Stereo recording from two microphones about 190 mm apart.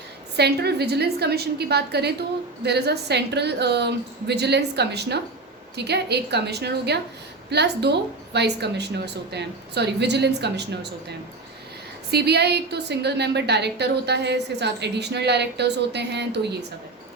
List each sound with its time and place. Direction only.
0.3 s a woman's voice: 60° right (ahead or behind)
12.1 s a woman's voice: 60° right (ahead or behind)